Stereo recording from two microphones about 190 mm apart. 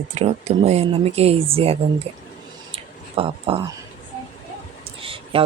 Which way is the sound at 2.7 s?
30° right (ahead or behind).